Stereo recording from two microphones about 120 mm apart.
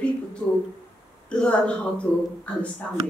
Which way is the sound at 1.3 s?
10° left (ahead or behind).